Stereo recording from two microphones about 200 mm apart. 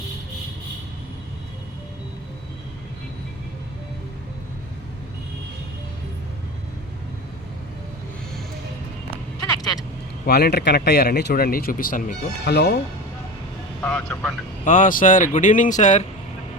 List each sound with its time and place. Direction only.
10.2 s speech: 55° left (ahead or behind)
13.8 s speech: 5° left (ahead or behind)
14.6 s speech: 40° left (ahead or behind)